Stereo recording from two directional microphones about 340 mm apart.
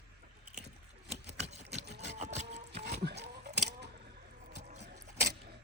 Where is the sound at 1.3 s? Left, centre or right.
Centre.